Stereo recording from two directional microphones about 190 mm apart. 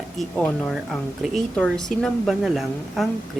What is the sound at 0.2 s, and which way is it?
A woman's voice, 5° left (ahead or behind).